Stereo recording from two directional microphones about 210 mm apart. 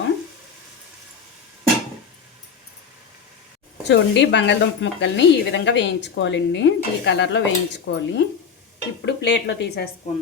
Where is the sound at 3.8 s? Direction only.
55° left (ahead or behind).